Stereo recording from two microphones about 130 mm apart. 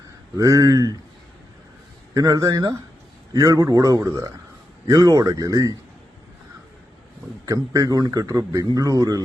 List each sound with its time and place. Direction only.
0.3 s speech: 25° right (ahead or behind)
2.1 s speech: 25° right (ahead or behind)
7.4 s speech: 25° right (ahead or behind)